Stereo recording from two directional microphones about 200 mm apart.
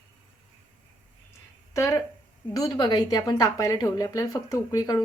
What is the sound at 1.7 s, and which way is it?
A woman's voice, 15° left (ahead or behind).